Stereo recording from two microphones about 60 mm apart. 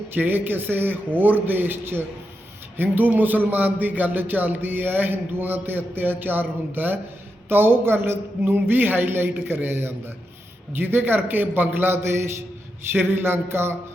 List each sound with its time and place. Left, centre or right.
0.1 s speech: right